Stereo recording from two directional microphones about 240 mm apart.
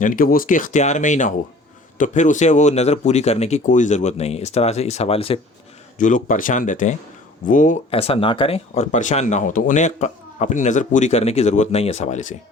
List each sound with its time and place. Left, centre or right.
0.0 s speech: left